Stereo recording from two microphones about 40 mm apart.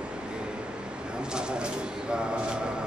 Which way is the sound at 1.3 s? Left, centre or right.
Right.